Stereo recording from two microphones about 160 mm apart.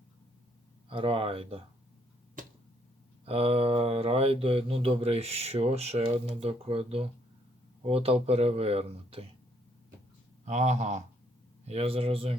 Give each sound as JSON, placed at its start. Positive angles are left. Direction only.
{"t": 0.9, "sound": "speech", "side_deg": -35}
{"t": 3.2, "sound": "speech", "side_deg": -40}
{"t": 10.4, "sound": "speech", "side_deg": -45}